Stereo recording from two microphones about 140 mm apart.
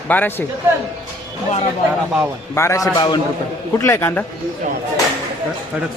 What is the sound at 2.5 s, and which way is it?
Speech, 20° left (ahead or behind).